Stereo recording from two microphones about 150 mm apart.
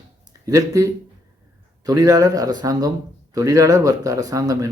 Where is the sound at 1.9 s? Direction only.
25° right (ahead or behind).